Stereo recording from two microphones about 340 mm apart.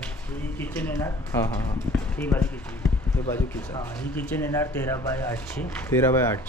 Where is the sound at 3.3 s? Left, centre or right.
Centre.